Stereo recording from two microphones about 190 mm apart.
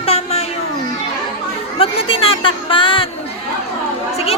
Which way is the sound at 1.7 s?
30° left (ahead or behind).